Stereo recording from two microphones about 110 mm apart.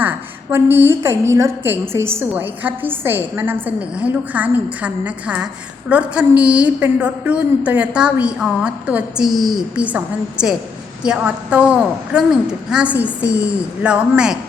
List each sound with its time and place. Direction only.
0.5 s a woman's voice: 20° right (ahead or behind)